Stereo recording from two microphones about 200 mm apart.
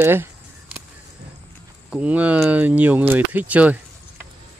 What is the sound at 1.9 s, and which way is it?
Speech, 5° right (ahead or behind).